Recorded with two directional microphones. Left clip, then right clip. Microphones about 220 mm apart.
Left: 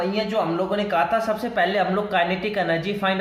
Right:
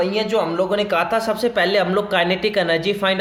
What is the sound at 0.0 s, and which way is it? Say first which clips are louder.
Speech: right 4 dB; 45° right (ahead or behind).